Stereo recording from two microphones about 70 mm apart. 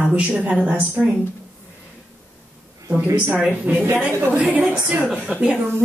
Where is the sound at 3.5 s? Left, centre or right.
Centre.